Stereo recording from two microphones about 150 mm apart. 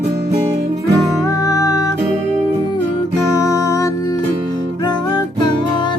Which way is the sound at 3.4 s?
20° left (ahead or behind).